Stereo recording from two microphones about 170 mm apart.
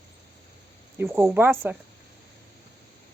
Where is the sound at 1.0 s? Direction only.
15° right (ahead or behind).